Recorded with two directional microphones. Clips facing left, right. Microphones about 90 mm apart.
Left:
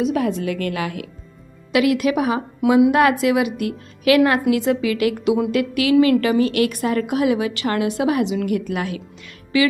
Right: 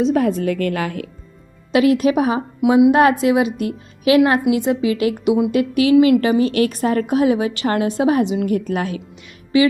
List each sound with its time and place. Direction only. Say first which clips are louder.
0.0 s a woman's voice: right 3 dB; 40° right (ahead or behind)